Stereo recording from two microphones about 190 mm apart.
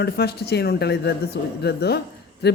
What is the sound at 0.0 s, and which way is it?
A man's voice, 55° left (ahead or behind).